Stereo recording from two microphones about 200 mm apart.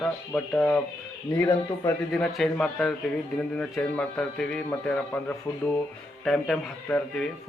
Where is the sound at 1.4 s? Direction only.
15° left (ahead or behind).